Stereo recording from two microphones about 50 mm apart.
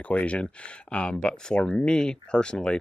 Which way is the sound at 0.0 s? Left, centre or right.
Left.